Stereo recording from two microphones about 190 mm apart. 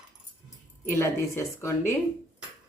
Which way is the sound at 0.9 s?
15° left (ahead or behind).